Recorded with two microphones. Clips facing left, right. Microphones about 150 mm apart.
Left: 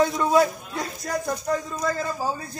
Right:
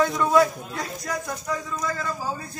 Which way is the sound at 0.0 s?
25° left (ahead or behind).